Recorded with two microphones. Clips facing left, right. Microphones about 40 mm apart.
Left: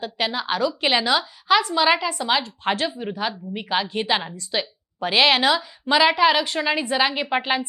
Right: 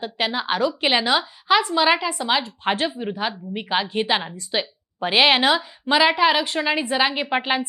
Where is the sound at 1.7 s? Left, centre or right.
Centre.